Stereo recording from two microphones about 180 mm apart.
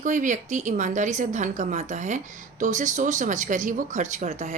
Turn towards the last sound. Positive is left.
turn(degrees=-40)  # may be behind; listen again after turning